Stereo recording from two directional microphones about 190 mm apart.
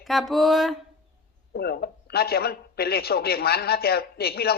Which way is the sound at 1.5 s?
55° left (ahead or behind).